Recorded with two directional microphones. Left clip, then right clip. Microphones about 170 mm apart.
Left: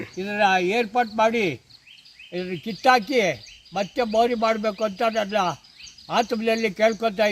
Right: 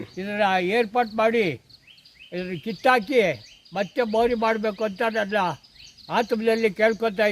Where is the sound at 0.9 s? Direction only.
15° right (ahead or behind).